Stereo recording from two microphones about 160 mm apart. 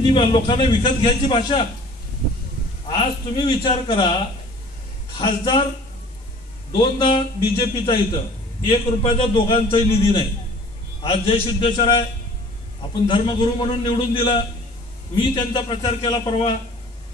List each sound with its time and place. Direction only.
0.0 s a man's voice: 30° left (ahead or behind)
2.9 s a man's voice: 30° left (ahead or behind)
5.2 s speech: 30° left (ahead or behind)
7.0 s a man's voice: 30° left (ahead or behind)
13.1 s a man's voice: 30° left (ahead or behind)